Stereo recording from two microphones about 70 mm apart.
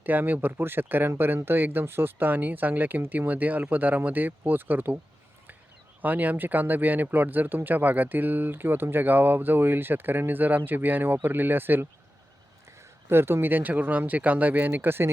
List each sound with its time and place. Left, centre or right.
0.0 s speech: right
6.0 s speech: right
13.1 s speech: right